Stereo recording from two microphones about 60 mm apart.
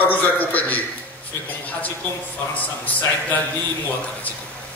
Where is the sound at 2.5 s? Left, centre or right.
Left.